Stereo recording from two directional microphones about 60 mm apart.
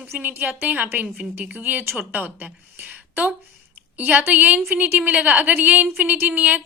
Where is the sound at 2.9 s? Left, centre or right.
Right.